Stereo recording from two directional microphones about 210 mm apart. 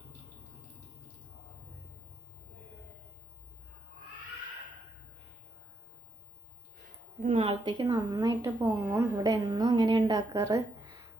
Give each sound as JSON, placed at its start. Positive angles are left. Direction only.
{"t": 7.2, "sound": "speech", "side_deg": -25}